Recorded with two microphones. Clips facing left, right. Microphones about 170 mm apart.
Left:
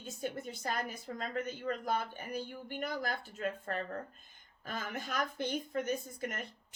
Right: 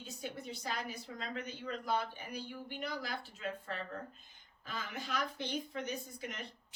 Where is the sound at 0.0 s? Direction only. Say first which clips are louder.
Left 5 dB; 50° left (ahead or behind).